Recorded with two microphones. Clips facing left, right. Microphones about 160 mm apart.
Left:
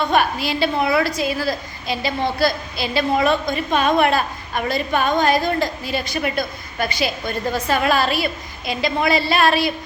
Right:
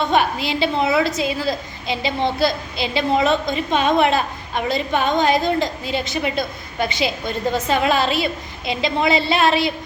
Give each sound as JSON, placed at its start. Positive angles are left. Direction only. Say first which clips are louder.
{"t": 0.0, "sound": "a woman's voice", "louder": "even", "side_deg": -20}